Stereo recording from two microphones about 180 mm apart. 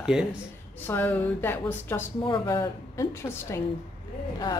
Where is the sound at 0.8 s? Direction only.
10° left (ahead or behind).